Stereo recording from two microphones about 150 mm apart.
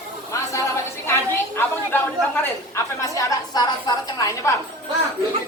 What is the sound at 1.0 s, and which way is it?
A woman's voice, 15° left (ahead or behind).